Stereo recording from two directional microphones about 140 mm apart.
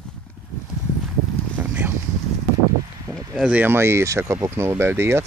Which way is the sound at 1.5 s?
10° right (ahead or behind).